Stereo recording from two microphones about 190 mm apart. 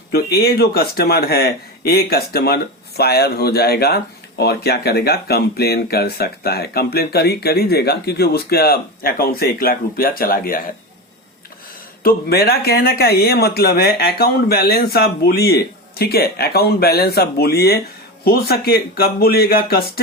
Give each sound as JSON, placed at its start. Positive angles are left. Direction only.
{"t": 0.1, "sound": "speech", "side_deg": 55}
{"t": 12.0, "sound": "speech", "side_deg": 55}